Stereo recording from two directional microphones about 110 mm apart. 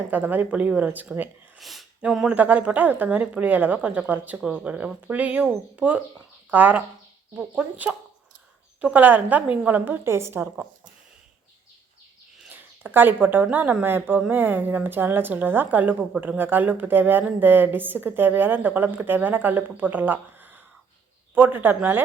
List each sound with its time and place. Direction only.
0.1 s speech: 15° right (ahead or behind)
1.5 s speech: centre (ahead or behind)
6.5 s speech: 15° right (ahead or behind)
12.5 s speech: 15° right (ahead or behind)